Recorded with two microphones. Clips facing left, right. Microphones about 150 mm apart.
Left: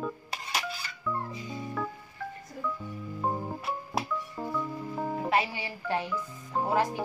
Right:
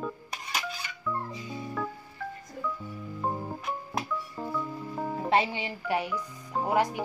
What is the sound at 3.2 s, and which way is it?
Music, 5° left (ahead or behind).